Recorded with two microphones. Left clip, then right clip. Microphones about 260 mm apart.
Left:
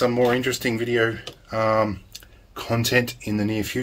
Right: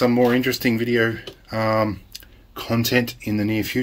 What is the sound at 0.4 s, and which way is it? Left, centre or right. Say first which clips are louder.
Speech: right 3 dB; right.